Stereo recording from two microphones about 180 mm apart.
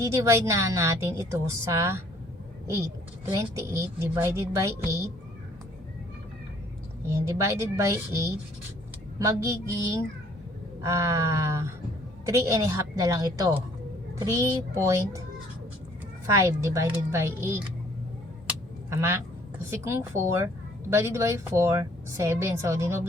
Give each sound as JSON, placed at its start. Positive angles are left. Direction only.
{"t": 0.0, "sound": "a woman's voice", "side_deg": -15}
{"t": 7.3, "sound": "a woman's voice", "side_deg": -15}
{"t": 16.2, "sound": "a woman's voice", "side_deg": -15}
{"t": 18.4, "sound": "a sound", "side_deg": -15}
{"t": 19.7, "sound": "a woman's voice", "side_deg": -15}